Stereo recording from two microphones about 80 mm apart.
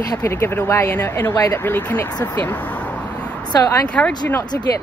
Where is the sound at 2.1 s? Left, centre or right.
Left.